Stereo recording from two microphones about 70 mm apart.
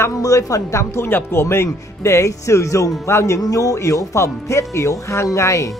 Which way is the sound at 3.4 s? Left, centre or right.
Left.